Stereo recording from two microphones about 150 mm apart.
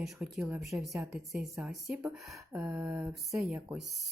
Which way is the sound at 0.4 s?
5° right (ahead or behind).